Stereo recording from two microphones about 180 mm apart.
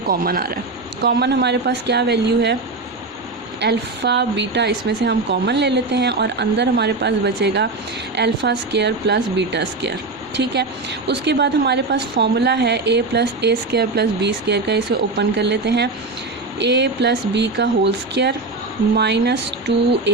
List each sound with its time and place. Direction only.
0.1 s speech: 55° right (ahead or behind)
1.0 s speech: 70° right (ahead or behind)
3.6 s speech: 70° right (ahead or behind)